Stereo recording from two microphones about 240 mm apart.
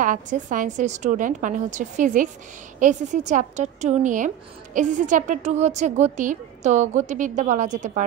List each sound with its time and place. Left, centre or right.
0.0 s a woman's voice: right